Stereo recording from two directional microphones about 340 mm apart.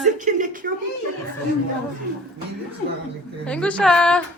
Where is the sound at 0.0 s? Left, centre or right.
Right.